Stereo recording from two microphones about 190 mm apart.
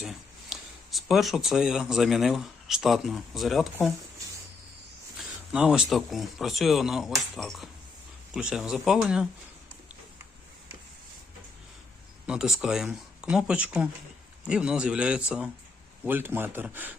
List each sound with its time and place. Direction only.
0.0 s speech: centre (ahead or behind)
5.1 s speech: 5° right (ahead or behind)
12.2 s speech: 5° right (ahead or behind)